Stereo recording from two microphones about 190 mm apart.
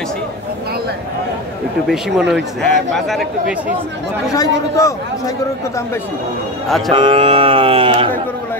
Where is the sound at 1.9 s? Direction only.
Centre (ahead or behind).